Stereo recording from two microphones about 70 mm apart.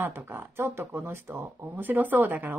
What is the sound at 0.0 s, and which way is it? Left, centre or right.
Speech, right.